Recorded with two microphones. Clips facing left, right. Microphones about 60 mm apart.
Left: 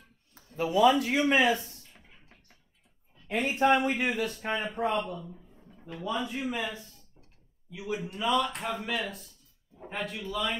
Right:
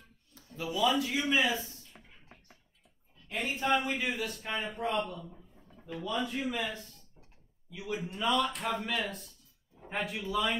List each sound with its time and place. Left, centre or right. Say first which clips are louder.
0.3 s speech: left 8 dB; left
2.0 s music: right 2 dB; centre
3.5 s a man's voice: left 6 dB; left
5.8 s a sound: right 1 dB; centre
6.0 s a man's voice: left 2 dB; centre
7.7 s a man's voice: left 2 dB; centre